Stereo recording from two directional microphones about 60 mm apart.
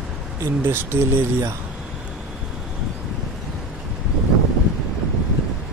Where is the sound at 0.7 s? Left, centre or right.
Right.